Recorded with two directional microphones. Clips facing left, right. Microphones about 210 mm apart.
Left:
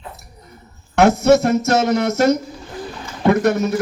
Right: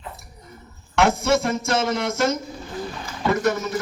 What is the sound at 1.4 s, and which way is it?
Speech, 40° left (ahead or behind).